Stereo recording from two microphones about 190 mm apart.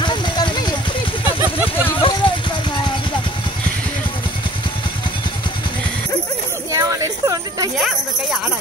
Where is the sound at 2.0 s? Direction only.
25° left (ahead or behind).